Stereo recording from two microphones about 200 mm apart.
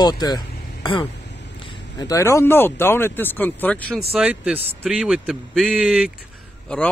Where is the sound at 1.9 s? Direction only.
15° left (ahead or behind).